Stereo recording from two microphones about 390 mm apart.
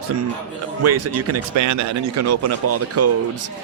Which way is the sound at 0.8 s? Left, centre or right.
Right.